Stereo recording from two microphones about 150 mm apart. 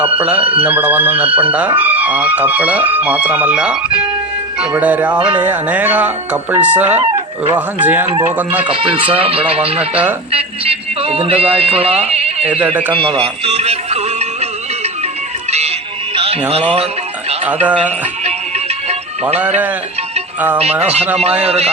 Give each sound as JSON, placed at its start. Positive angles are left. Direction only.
{"t": 0.2, "sound": "speech", "side_deg": -10}
{"t": 8.7, "sound": "a man's voice", "side_deg": -35}
{"t": 9.7, "sound": "speech", "side_deg": -10}
{"t": 10.3, "sound": "a man's voice", "side_deg": -40}
{"t": 12.4, "sound": "speech", "side_deg": -10}
{"t": 12.9, "sound": "speech", "side_deg": -35}
{"t": 16.1, "sound": "music", "side_deg": -40}
{"t": 17.4, "sound": "speech", "side_deg": -10}
{"t": 20.8, "sound": "speech", "side_deg": -45}